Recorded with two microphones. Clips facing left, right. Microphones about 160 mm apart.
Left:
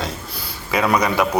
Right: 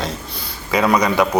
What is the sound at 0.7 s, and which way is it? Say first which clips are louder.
Speech: right 2 dB; 5° left (ahead or behind).